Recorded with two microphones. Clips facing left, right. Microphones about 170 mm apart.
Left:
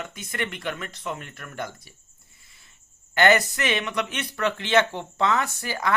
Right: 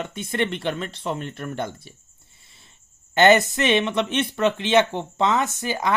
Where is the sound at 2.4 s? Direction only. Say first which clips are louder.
Right 6 dB; 25° right (ahead or behind).